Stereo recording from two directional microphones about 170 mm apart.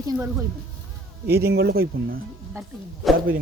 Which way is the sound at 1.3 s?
70° right (ahead or behind).